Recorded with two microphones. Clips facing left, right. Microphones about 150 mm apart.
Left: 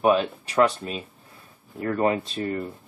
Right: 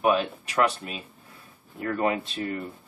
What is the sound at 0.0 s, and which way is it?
Speech, 30° left (ahead or behind).